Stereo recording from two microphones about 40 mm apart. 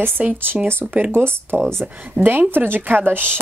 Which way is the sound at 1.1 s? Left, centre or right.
Right.